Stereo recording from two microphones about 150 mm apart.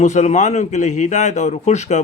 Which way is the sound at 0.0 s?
50° left (ahead or behind).